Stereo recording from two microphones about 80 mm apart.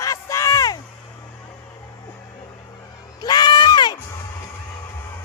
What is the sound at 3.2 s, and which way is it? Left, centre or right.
Crowd, left.